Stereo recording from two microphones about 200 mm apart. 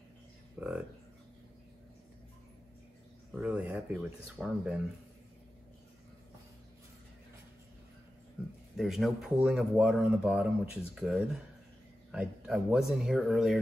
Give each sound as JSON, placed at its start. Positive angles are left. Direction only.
{"t": 0.6, "sound": "speech", "side_deg": -5}
{"t": 3.3, "sound": "speech", "side_deg": -5}
{"t": 8.7, "sound": "speech", "side_deg": 0}